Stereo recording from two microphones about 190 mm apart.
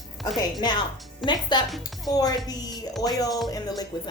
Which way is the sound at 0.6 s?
25° left (ahead or behind).